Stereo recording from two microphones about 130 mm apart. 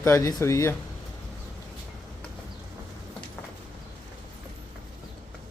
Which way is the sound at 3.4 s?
10° left (ahead or behind).